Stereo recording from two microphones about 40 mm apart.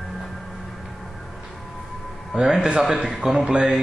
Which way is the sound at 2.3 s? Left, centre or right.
Centre.